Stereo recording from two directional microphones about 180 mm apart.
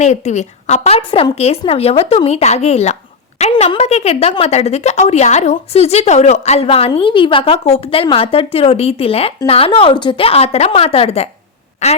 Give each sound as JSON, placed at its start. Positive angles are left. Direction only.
{"t": 0.0, "sound": "a woman's voice", "side_deg": 40}